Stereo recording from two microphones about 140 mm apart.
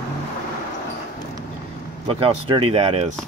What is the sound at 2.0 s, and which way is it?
Speech, 40° right (ahead or behind).